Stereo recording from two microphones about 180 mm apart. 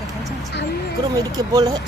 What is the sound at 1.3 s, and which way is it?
Speech, 20° right (ahead or behind).